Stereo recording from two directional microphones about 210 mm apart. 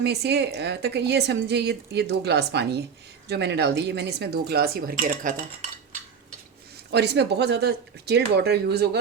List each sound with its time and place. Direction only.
0.0 s speech: 50° right (ahead or behind)
6.9 s speech: 55° right (ahead or behind)